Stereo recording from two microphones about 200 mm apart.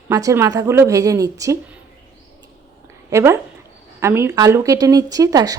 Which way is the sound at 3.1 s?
15° right (ahead or behind).